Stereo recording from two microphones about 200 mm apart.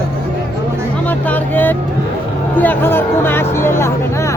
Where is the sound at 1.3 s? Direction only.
10° left (ahead or behind).